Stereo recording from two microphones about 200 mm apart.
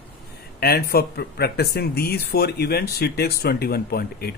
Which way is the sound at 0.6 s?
50° left (ahead or behind).